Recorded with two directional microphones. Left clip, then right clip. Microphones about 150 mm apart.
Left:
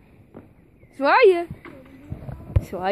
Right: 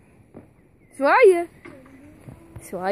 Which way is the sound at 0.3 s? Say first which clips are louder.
Left 1 dB; 20° right (ahead or behind).